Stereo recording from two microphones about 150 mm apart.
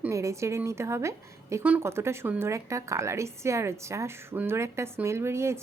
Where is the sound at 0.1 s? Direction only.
20° right (ahead or behind).